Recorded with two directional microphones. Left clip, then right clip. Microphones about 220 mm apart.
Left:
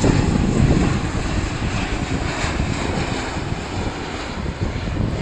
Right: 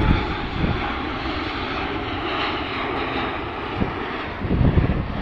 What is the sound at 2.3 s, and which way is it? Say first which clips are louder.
Vehicle: right 1 dB; 35° left (ahead or behind).